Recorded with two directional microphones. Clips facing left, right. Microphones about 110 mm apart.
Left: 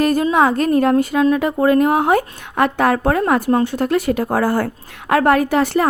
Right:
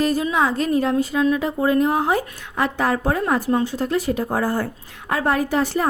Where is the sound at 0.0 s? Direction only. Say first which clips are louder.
Left 5 dB; 55° left (ahead or behind).